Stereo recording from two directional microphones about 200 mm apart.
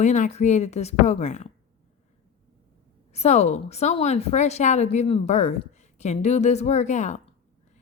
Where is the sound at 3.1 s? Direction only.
35° left (ahead or behind).